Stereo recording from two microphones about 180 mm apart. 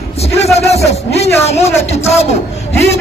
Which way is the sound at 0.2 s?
35° left (ahead or behind).